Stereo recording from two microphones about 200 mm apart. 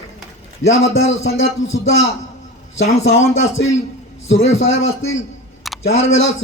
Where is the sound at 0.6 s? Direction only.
70° left (ahead or behind).